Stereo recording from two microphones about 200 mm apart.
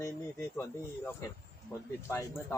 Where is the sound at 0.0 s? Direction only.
15° left (ahead or behind).